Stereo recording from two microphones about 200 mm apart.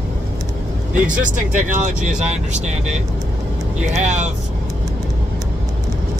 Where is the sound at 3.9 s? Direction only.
35° right (ahead or behind).